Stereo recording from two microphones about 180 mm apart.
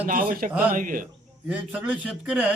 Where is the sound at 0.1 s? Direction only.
50° right (ahead or behind).